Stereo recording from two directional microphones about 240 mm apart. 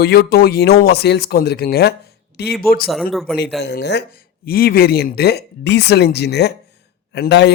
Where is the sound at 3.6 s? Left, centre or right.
Left.